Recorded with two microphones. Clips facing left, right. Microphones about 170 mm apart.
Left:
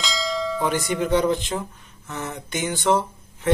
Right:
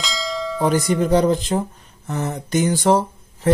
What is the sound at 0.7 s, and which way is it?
Speech, 35° right (ahead or behind).